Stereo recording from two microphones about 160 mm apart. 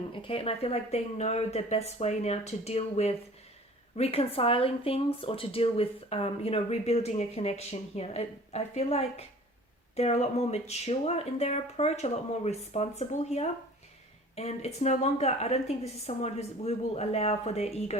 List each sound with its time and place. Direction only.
0.1 s speech: 35° left (ahead or behind)